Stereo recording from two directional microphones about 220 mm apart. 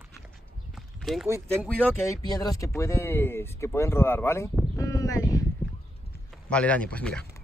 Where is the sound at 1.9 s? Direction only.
15° left (ahead or behind).